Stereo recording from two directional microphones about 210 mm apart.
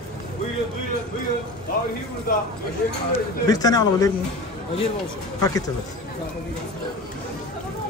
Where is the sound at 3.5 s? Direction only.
15° left (ahead or behind).